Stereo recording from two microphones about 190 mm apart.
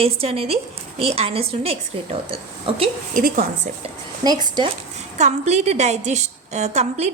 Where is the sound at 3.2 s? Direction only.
50° right (ahead or behind).